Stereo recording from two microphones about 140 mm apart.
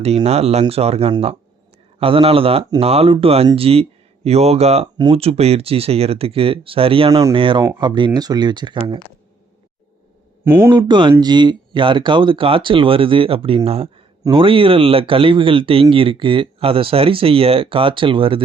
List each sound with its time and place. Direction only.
0.0 s speech: 45° right (ahead or behind)
10.4 s speech: 15° right (ahead or behind)
10.8 s speech: 35° right (ahead or behind)